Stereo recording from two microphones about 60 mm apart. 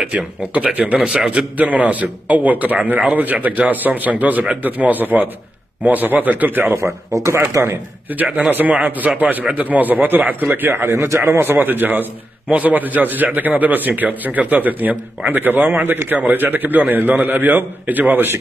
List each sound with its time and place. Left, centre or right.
0.0 s a man's voice: right
7.2 s speech: right
8.2 s a man's voice: right